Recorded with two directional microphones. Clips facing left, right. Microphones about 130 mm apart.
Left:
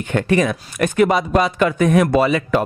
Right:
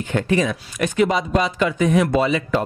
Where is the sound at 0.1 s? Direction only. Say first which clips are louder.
Left 3 dB; 60° left (ahead or behind).